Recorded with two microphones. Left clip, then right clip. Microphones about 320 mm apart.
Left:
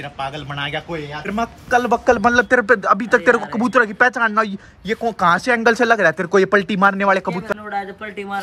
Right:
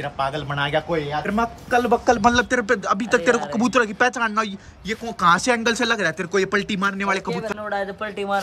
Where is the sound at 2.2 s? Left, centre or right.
Centre.